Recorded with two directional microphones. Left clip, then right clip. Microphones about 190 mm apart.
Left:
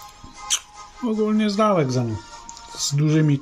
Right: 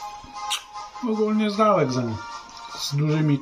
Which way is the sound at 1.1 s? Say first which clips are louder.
Left 1 dB; 60° left (ahead or behind).